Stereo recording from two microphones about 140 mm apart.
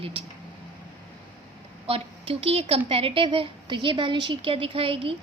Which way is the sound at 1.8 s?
45° right (ahead or behind).